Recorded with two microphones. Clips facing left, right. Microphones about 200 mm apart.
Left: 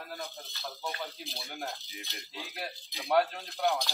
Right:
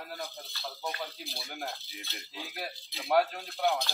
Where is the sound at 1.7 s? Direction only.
15° left (ahead or behind).